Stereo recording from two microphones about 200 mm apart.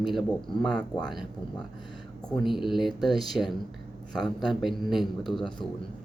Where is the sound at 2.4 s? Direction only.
Centre (ahead or behind).